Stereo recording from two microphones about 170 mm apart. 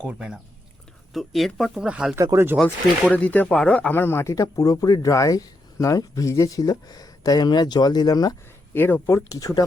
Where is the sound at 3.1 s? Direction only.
10° left (ahead or behind).